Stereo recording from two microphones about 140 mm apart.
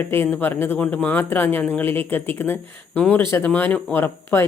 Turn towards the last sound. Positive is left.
turn(degrees=15)  # may be behind; listen again after turning